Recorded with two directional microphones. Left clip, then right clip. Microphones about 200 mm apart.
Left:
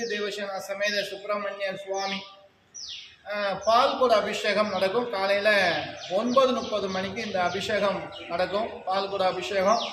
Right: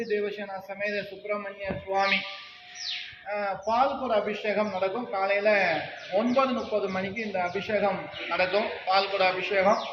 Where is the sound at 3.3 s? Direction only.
20° left (ahead or behind).